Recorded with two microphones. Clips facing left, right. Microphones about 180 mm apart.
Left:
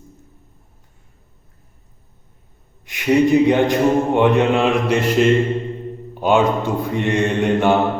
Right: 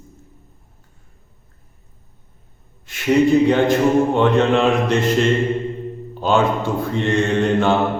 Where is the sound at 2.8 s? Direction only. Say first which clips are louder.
Even; 15° left (ahead or behind).